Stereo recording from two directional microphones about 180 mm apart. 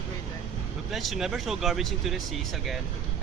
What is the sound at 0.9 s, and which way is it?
Speech, centre (ahead or behind).